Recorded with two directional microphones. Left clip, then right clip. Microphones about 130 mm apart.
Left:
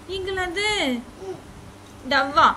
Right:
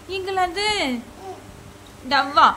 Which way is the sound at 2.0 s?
10° right (ahead or behind).